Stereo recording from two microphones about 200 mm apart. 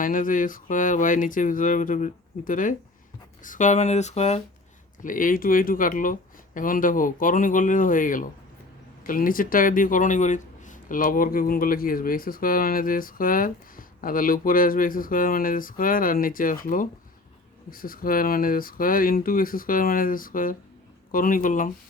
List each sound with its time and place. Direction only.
0.0 s speech: 40° left (ahead or behind)